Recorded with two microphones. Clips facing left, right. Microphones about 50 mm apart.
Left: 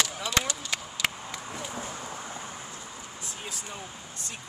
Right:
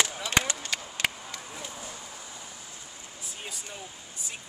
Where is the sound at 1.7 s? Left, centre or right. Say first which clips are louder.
Left 5 dB; left.